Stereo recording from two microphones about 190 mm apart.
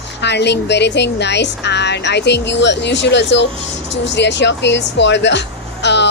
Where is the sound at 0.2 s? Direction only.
65° left (ahead or behind).